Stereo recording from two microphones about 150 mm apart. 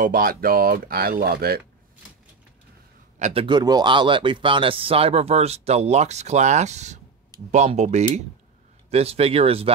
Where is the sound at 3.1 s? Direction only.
50° right (ahead or behind).